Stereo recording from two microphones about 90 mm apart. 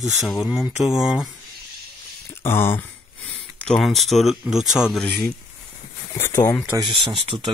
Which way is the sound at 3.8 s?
Centre (ahead or behind).